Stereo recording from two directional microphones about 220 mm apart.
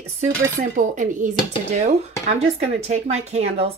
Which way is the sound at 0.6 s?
35° right (ahead or behind).